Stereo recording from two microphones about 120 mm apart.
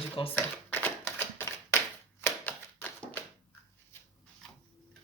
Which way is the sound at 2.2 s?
15° left (ahead or behind).